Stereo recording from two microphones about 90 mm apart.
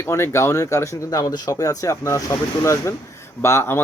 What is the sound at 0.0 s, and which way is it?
Speech, 30° left (ahead or behind).